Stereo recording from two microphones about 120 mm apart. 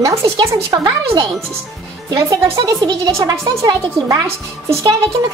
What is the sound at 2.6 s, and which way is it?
A woman's voice, 25° right (ahead or behind).